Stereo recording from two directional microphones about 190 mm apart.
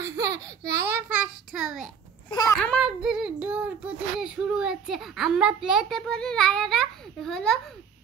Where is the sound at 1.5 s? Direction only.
Centre (ahead or behind).